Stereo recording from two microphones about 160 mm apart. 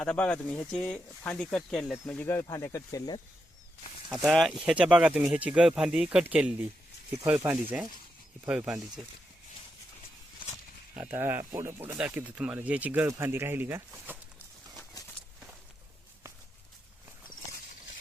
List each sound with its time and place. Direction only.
0.0 s speech: 5° left (ahead or behind)
4.1 s speech: centre (ahead or behind)
10.9 s speech: 10° right (ahead or behind)